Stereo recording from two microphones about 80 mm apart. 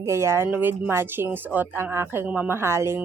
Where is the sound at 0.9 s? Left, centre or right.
Right.